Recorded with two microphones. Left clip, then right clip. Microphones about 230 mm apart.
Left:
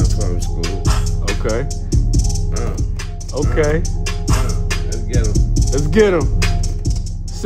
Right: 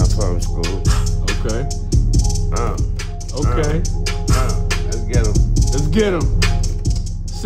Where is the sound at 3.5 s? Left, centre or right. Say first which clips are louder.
Left 5 dB; centre.